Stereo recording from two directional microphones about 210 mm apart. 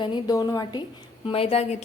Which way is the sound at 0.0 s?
20° left (ahead or behind).